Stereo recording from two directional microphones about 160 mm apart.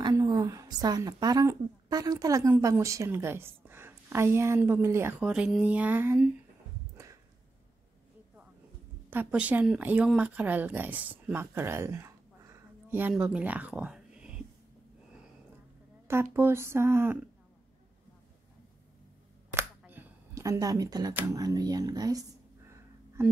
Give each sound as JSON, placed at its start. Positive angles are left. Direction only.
{"t": 0.0, "sound": "a woman's voice", "side_deg": -25}
{"t": 9.1, "sound": "speech", "side_deg": -10}
{"t": 16.1, "sound": "a woman's voice", "side_deg": -15}
{"t": 19.8, "sound": "a sound", "side_deg": -10}
{"t": 21.1, "sound": "a woman's voice", "side_deg": -10}
{"t": 21.4, "sound": "speech", "side_deg": -25}